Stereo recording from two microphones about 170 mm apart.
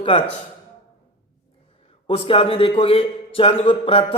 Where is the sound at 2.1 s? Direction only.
30° left (ahead or behind).